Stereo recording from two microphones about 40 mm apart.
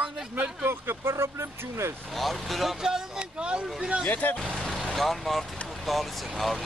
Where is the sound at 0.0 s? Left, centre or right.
Right.